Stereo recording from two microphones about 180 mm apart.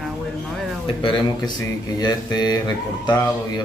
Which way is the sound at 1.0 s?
25° left (ahead or behind).